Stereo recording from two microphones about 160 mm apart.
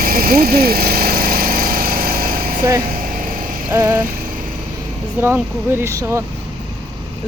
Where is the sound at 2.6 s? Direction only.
20° right (ahead or behind).